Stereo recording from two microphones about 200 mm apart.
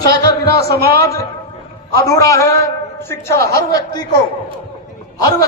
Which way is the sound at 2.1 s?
15° left (ahead or behind).